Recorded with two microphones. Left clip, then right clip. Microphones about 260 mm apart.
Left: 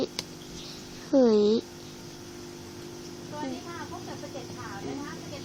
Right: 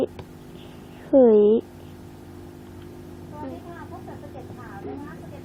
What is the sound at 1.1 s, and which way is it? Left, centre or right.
Speech, centre.